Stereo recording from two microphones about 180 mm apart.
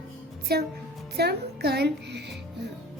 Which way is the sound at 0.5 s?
60° right (ahead or behind).